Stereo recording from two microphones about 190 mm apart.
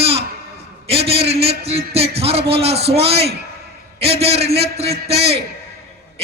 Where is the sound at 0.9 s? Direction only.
30° right (ahead or behind).